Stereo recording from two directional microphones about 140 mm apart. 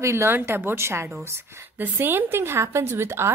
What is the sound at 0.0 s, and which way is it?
A woman's voice, 20° right (ahead or behind).